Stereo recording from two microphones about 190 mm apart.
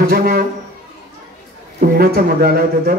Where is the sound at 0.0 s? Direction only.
50° right (ahead or behind).